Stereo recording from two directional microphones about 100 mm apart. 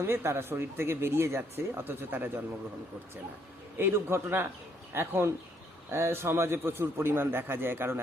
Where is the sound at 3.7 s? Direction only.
25° right (ahead or behind).